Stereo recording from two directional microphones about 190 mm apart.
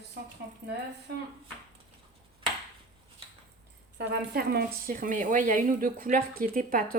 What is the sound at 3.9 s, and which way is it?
A woman's voice, 55° right (ahead or behind).